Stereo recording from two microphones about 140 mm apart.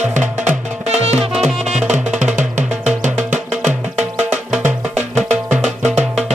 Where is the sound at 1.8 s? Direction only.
5° right (ahead or behind).